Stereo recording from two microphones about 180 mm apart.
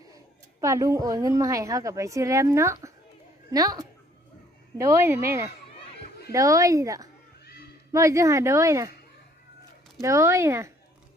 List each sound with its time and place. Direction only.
0.6 s a woman's voice: 15° right (ahead or behind)
10.0 s a woman's voice: 15° right (ahead or behind)